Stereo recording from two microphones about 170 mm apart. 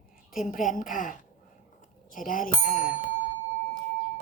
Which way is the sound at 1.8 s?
50° left (ahead or behind).